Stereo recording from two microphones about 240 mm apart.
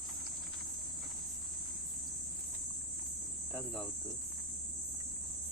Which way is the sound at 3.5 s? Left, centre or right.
Centre.